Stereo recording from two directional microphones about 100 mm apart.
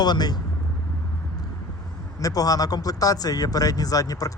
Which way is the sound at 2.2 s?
35° left (ahead or behind).